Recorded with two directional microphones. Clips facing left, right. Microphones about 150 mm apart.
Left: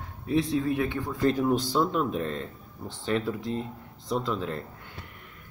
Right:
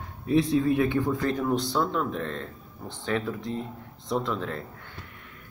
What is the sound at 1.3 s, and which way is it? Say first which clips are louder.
Speech: left 1 dB; 10° left (ahead or behind).